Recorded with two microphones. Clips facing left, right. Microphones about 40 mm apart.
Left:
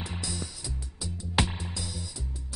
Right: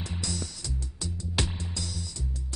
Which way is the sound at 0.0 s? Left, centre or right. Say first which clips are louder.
Right 1 dB; centre.